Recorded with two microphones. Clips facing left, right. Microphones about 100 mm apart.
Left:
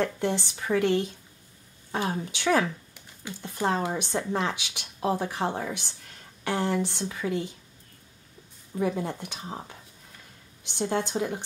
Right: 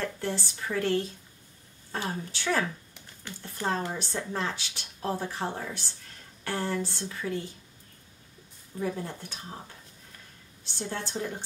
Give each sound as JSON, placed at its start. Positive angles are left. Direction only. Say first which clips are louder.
{"t": 0.0, "sound": "speech", "louder": "left 5 dB", "side_deg": 20}
{"t": 8.8, "sound": "speech", "louder": "left 4 dB", "side_deg": 15}
{"t": 10.6, "sound": "a woman's voice", "louder": "left 7 dB", "side_deg": 15}
{"t": 11.1, "sound": "speech", "louder": "left 5 dB", "side_deg": 55}